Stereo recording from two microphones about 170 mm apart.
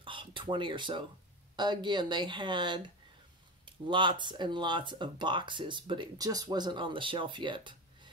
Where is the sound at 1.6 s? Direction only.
25° right (ahead or behind).